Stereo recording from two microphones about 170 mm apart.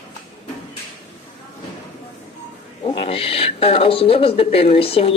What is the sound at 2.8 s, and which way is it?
Speech, 30° left (ahead or behind).